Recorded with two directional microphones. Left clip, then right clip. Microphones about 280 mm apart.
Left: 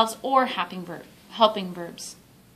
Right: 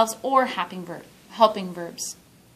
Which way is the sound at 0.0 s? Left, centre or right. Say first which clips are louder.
Right 1 dB; centre.